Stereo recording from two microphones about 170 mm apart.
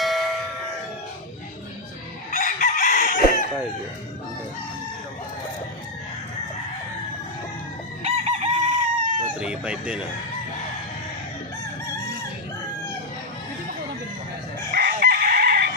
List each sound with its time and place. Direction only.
0.0 s bell: centre (ahead or behind)
2.3 s chicken: 55° left (ahead or behind)
8.0 s chicken: 40° right (ahead or behind)
9.4 s speech: 5° right (ahead or behind)
14.7 s chicken: 60° right (ahead or behind)